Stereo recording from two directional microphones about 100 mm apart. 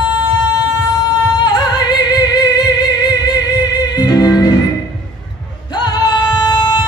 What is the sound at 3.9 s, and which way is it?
Music, 45° left (ahead or behind).